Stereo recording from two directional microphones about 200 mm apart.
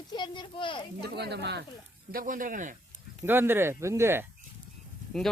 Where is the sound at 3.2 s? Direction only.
10° right (ahead or behind).